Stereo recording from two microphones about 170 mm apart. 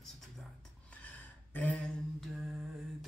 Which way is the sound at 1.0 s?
10° left (ahead or behind).